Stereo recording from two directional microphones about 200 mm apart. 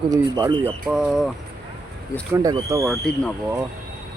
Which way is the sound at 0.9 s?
5° right (ahead or behind).